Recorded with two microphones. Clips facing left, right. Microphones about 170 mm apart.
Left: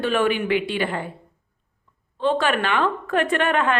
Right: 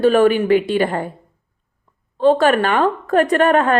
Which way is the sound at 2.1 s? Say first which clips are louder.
Right 8 dB; 40° right (ahead or behind).